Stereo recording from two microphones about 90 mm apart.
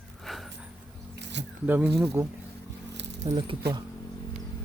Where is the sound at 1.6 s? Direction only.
20° right (ahead or behind).